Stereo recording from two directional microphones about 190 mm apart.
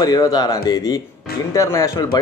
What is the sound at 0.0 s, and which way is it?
A man's voice, 20° left (ahead or behind).